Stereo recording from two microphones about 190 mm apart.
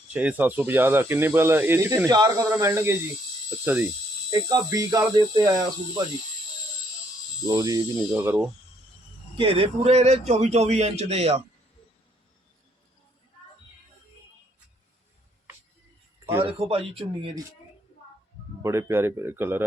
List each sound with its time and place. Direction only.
0.1 s speech: 10° right (ahead or behind)
4.3 s speech: 20° right (ahead or behind)
7.4 s speech: 20° right (ahead or behind)
9.4 s a man's voice: 30° right (ahead or behind)
16.4 s speech: 30° right (ahead or behind)
18.6 s speech: 15° right (ahead or behind)